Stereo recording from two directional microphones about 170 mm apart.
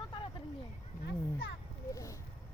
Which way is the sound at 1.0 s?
85° left.